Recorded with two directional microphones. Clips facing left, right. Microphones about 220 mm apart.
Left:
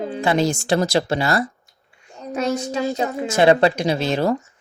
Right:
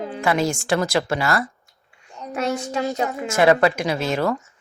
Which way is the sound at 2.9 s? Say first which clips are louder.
Left 2 dB; 35° left (ahead or behind).